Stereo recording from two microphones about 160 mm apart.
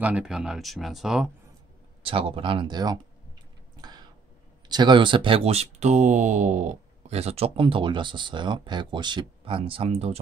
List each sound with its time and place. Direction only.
0.0 s speech: 5° right (ahead or behind)
2.0 s speech: 35° right (ahead or behind)
4.6 s speech: 25° right (ahead or behind)